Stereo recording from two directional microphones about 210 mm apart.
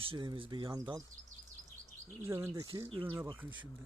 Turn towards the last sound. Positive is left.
turn(degrees=-10)  # may be behind; listen again after turning